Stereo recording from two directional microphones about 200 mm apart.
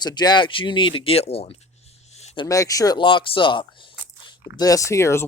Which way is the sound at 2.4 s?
15° left (ahead or behind).